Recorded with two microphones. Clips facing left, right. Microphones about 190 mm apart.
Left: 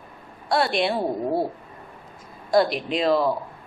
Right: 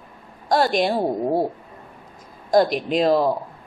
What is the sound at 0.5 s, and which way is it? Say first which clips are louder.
Speech: right 3 dB; 40° right (ahead or behind).